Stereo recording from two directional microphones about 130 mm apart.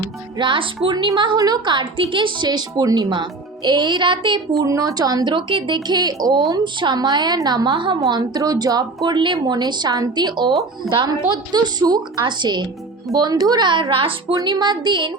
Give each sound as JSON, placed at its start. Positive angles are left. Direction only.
{"t": 0.3, "sound": "a woman's voice", "side_deg": -40}
{"t": 4.6, "sound": "a woman's voice", "side_deg": -25}
{"t": 10.8, "sound": "speech", "side_deg": 0}
{"t": 11.5, "sound": "a woman's voice", "side_deg": -30}
{"t": 14.3, "sound": "a woman's voice", "side_deg": -30}